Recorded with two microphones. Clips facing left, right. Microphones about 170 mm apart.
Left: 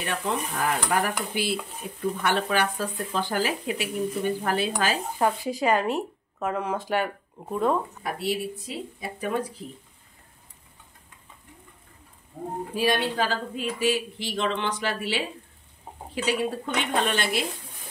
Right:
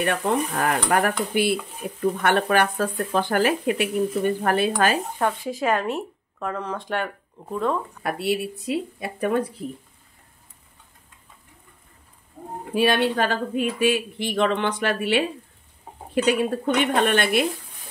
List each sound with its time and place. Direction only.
0.0 s speech: 55° right (ahead or behind)
5.2 s speech: centre (ahead or behind)
8.0 s speech: 65° right (ahead or behind)
12.7 s speech: 65° right (ahead or behind)
16.3 s speech: 50° right (ahead or behind)